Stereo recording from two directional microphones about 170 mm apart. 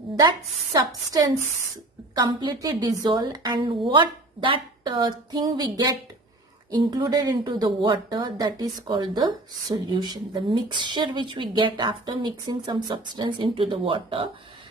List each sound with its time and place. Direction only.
2.1 s speech: 25° right (ahead or behind)